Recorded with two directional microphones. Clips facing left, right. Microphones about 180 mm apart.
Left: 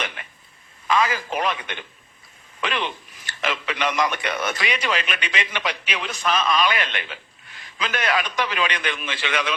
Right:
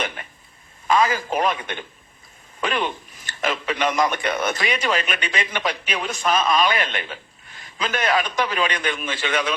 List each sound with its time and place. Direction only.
0.0 s telephone: 40° right (ahead or behind)
0.9 s a man's voice: 45° right (ahead or behind)